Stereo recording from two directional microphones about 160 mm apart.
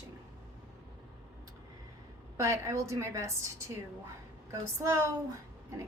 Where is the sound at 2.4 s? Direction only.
20° right (ahead or behind).